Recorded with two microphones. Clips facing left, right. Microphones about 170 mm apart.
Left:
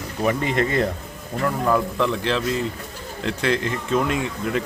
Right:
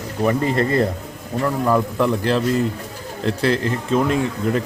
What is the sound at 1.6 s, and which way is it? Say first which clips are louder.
Speech: right 2 dB; 10° right (ahead or behind).